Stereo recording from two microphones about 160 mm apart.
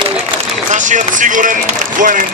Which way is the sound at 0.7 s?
50° right (ahead or behind).